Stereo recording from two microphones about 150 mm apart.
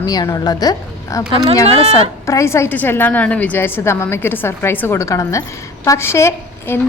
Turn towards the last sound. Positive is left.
turn(degrees=15)  # may be behind; listen again after turning